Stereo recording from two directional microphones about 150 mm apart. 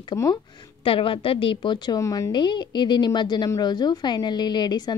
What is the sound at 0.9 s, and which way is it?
A woman's voice, 35° left (ahead or behind).